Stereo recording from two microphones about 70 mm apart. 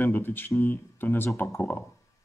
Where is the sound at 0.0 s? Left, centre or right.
Left.